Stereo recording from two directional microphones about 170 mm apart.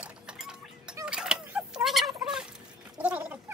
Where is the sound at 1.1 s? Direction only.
5° right (ahead or behind).